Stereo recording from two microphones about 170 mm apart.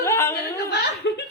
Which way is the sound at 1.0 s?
90° left.